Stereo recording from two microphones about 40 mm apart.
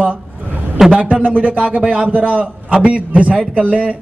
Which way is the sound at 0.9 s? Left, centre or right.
Right.